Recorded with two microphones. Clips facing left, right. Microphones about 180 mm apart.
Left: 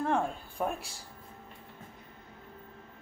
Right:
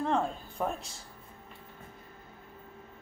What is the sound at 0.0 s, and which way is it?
Speech, 10° left (ahead or behind).